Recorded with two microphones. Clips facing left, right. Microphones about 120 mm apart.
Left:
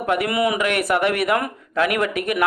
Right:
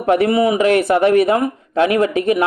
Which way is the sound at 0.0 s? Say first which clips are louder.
Right 6 dB; 30° right (ahead or behind).